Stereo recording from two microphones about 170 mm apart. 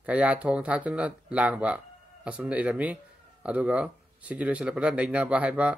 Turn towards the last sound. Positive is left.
turn(degrees=-5)  # may be behind; listen again after turning